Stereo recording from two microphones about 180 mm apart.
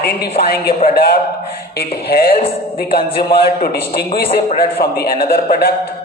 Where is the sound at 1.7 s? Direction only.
60° left (ahead or behind).